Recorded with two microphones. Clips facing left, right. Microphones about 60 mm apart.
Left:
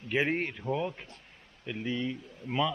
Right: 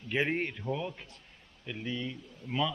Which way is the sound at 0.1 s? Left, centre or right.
Centre.